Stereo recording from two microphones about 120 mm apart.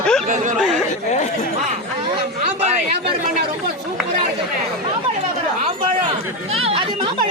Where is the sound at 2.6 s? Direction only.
65° right (ahead or behind).